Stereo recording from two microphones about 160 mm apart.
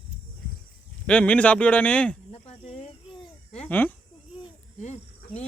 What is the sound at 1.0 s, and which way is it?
A man's voice, 10° left (ahead or behind).